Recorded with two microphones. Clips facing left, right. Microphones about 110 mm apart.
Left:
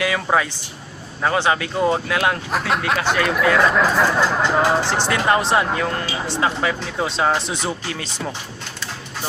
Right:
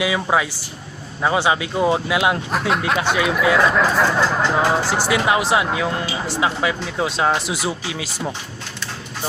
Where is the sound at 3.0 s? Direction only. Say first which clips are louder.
Even; 10° right (ahead or behind).